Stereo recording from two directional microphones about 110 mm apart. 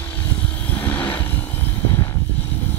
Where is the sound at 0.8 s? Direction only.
15° left (ahead or behind).